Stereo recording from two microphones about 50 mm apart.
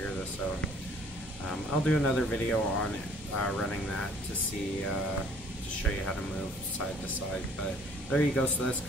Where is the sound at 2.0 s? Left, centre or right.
Centre.